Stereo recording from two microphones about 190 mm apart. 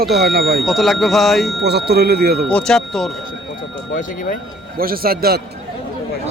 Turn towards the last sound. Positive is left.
turn(degrees=-55)  # may be behind; listen again after turning